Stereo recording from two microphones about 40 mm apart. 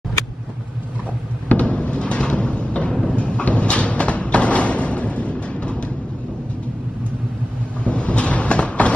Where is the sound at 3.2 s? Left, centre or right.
Left.